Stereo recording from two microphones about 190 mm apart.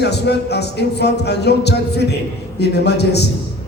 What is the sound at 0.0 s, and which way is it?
A man's voice, 60° left (ahead or behind).